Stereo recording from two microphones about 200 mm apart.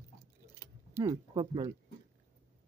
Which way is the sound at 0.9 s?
15° right (ahead or behind).